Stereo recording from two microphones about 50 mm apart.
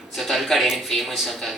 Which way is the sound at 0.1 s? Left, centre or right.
Centre.